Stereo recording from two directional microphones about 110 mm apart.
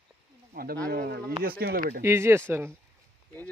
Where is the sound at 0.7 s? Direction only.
10° left (ahead or behind).